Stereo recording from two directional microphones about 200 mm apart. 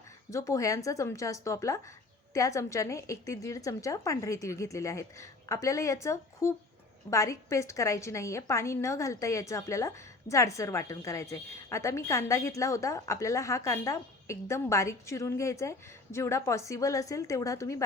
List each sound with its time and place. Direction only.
0.3 s a woman's voice: 15° left (ahead or behind)